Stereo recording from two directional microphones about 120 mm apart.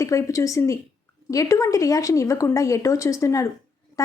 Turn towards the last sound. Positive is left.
turn(degrees=25)  # may be behind; listen again after turning